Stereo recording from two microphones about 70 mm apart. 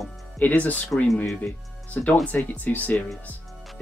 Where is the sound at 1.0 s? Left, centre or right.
Centre.